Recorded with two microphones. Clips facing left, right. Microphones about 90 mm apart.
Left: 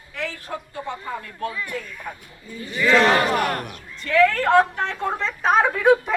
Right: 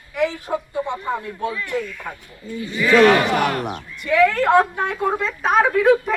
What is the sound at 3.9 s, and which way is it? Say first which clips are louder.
A woman's voice: right 1 dB; 15° right (ahead or behind).